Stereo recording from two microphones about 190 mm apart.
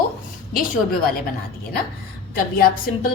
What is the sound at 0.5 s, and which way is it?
Speech, 50° left (ahead or behind).